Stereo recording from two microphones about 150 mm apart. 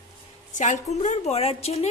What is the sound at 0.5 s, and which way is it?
A woman's voice, 55° left (ahead or behind).